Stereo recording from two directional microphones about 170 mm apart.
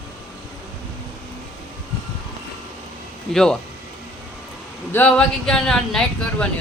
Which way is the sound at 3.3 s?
5° left (ahead or behind).